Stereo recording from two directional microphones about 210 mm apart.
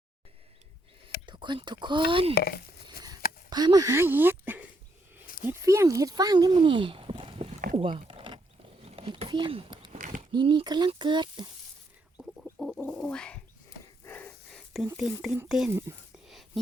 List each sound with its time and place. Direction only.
1.3 s speech: 20° right (ahead or behind)
2.3 s speech: 45° left (ahead or behind)
3.5 s speech: 20° right (ahead or behind)
7.8 s a sound: 25° right (ahead or behind)
9.9 s a sound: 35° right (ahead or behind)
10.2 s speech: 25° right (ahead or behind)
12.1 s bird: 5° right (ahead or behind)
14.0 s dog: 10° left (ahead or behind)
14.9 s speech: 5° right (ahead or behind)
16.2 s whispering: centre (ahead or behind)